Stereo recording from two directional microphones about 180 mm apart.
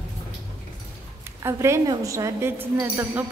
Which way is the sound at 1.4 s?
15° right (ahead or behind).